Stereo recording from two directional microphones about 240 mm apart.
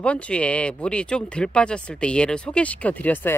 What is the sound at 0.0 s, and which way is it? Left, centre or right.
Speech, centre.